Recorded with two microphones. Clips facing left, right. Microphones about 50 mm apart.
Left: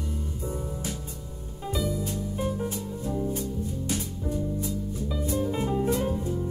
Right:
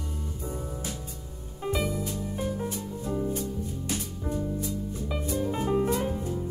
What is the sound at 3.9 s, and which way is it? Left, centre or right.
Music, right.